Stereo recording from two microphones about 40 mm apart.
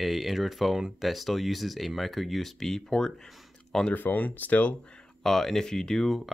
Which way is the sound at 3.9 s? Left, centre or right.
Left.